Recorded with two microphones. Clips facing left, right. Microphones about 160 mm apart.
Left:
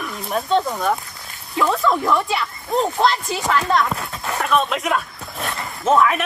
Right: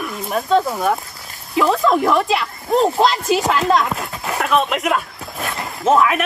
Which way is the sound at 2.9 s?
35° right (ahead or behind).